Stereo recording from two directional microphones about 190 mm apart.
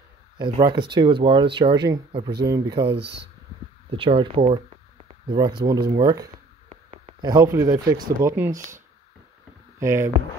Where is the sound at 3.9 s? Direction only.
30° right (ahead or behind).